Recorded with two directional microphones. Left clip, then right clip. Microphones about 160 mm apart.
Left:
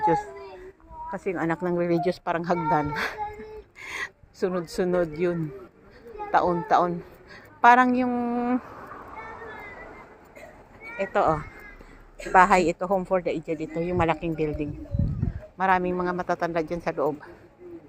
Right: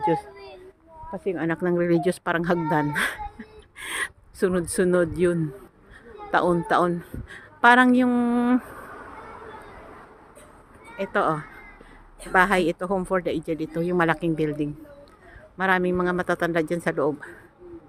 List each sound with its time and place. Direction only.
1.2 s a man's voice: 35° right (ahead or behind); by 8.6 s 70° right (ahead or behind)
11.0 s speech: 50° right (ahead or behind)
12.3 s a man's voice: 30° right (ahead or behind); by 17.3 s 55° right (ahead or behind)